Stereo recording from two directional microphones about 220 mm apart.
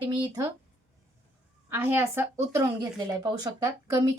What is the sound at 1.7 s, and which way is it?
A woman's voice, 10° right (ahead or behind).